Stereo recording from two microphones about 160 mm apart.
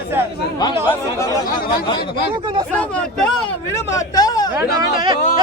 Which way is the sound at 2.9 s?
5° left (ahead or behind).